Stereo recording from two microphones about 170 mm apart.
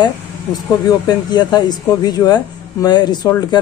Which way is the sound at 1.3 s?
25° left (ahead or behind).